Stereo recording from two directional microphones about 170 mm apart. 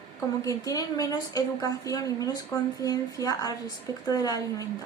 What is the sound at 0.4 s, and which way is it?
A woman's voice, 20° left (ahead or behind).